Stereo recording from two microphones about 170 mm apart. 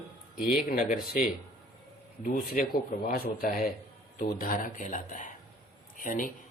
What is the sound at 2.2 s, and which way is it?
A man's voice, 60° left (ahead or behind).